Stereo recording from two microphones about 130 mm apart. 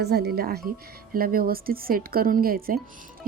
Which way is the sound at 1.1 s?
90° right.